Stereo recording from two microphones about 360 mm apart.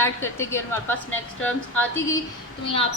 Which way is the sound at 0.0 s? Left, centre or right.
Centre.